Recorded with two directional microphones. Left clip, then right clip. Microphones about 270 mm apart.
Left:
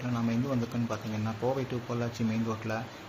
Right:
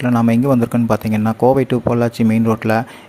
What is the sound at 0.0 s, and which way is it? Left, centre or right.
Speech, right.